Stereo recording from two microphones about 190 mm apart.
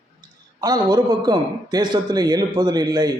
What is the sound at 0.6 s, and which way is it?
A man's voice, 20° right (ahead or behind).